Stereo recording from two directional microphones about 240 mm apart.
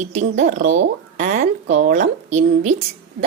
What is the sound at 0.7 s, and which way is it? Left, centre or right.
Speech, right.